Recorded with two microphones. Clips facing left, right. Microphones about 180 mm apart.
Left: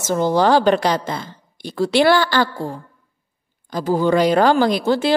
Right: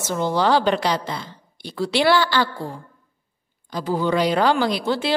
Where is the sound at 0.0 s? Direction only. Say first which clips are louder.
Left 4 dB; 45° left (ahead or behind).